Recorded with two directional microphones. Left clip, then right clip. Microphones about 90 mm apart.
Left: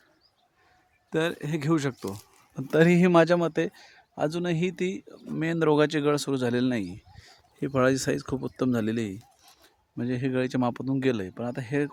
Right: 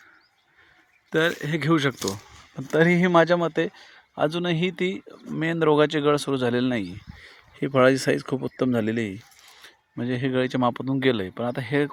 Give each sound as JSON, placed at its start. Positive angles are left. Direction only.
{"t": 1.1, "sound": "speech", "side_deg": -10}
{"t": 2.6, "sound": "speech", "side_deg": 25}
{"t": 3.4, "sound": "speech", "side_deg": 5}
{"t": 4.1, "sound": "speech", "side_deg": -20}
{"t": 8.4, "sound": "speech", "side_deg": -10}